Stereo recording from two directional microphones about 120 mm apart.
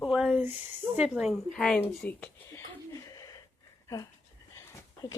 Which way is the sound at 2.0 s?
20° left (ahead or behind).